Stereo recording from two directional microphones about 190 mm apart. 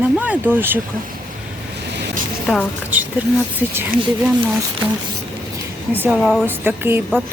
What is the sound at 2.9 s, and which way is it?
Speech, 10° right (ahead or behind).